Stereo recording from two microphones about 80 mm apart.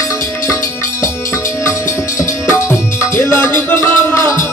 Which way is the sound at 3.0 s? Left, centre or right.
Left.